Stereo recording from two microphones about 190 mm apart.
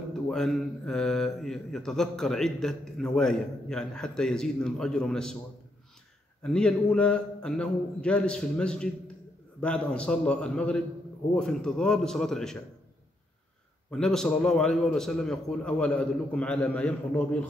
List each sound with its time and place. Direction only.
0.3 s a man's voice: centre (ahead or behind)
6.4 s a man's voice: 5° left (ahead or behind)
13.8 s a man's voice: 5° left (ahead or behind)